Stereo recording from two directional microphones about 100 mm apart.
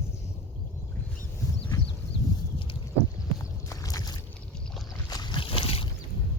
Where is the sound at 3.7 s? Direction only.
35° left (ahead or behind); by 5.8 s 70° left (ahead or behind).